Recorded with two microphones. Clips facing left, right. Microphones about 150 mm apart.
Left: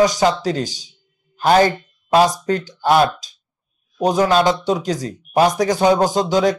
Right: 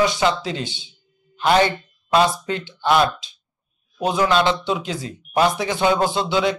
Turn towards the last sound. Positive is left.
turn(degrees=40)  # may be behind; listen again after turning